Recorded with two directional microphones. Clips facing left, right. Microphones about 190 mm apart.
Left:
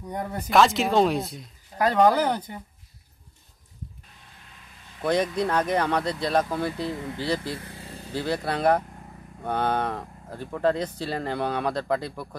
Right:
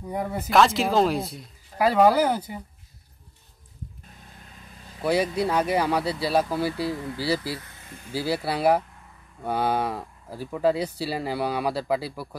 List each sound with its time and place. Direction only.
0.0 s speech: 5° right (ahead or behind)
5.0 s speech: 5° right (ahead or behind)
7.6 s vehicle: 30° left (ahead or behind)
8.1 s speech: 5° right (ahead or behind)